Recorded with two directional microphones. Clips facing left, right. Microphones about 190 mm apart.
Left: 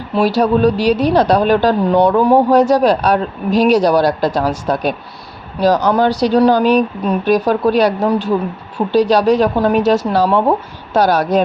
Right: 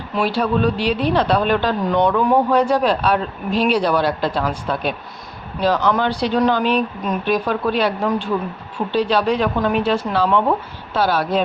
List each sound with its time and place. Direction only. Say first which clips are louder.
0.1 s a woman's voice: left 6 dB; 40° left (ahead or behind)